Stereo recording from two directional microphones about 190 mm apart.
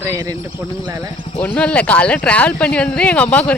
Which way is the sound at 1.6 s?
5° left (ahead or behind).